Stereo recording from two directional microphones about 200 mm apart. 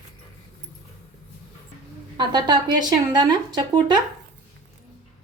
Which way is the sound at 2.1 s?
20° right (ahead or behind).